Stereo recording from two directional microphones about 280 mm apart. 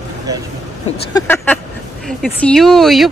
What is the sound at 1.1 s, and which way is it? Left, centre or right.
A man's voice, centre.